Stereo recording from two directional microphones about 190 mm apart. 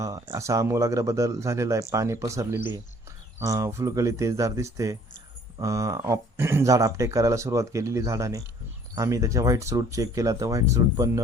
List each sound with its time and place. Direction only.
0.0 s speech: 15° right (ahead or behind)